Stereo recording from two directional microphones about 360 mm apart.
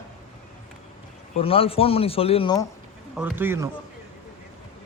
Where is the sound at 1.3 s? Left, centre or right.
Centre.